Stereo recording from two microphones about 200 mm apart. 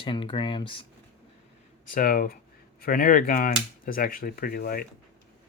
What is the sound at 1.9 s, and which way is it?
Speech, 45° left (ahead or behind).